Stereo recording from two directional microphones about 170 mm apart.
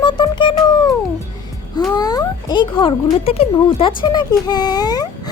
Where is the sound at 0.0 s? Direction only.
25° left (ahead or behind).